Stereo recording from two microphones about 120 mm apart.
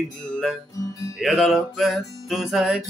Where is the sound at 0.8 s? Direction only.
25° left (ahead or behind).